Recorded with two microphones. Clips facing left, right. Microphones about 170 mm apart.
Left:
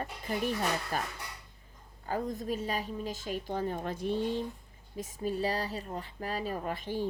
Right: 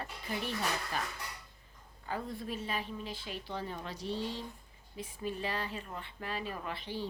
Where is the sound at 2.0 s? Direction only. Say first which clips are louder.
Left 5 dB; 45° left (ahead or behind).